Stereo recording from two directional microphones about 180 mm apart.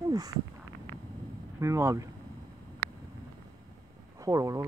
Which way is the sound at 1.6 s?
15° right (ahead or behind).